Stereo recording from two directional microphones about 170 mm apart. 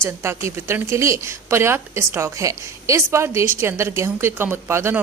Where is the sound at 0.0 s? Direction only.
15° right (ahead or behind).